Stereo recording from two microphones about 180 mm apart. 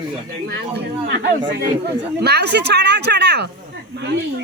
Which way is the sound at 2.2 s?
65° right (ahead or behind).